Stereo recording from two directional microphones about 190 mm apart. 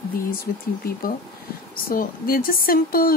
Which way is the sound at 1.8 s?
50° left (ahead or behind).